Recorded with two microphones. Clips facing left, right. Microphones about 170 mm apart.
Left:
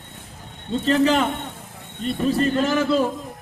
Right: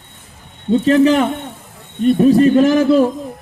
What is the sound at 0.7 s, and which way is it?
Speech, 45° right (ahead or behind).